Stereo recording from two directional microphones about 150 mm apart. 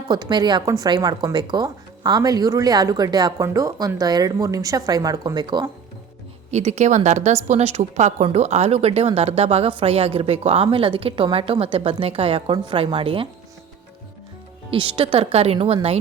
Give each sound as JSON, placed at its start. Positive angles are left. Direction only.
{"t": 0.1, "sound": "speech", "side_deg": -30}
{"t": 6.5, "sound": "a woman's voice", "side_deg": -50}
{"t": 14.7, "sound": "a woman's voice", "side_deg": -35}